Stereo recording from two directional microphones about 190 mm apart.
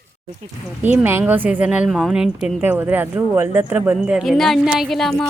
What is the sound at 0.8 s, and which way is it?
A woman's voice, 10° right (ahead or behind).